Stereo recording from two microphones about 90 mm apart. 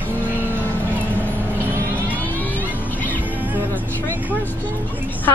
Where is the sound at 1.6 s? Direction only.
25° right (ahead or behind).